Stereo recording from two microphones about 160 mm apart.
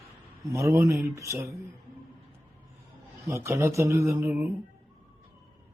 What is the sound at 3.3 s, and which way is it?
Speech, 20° right (ahead or behind).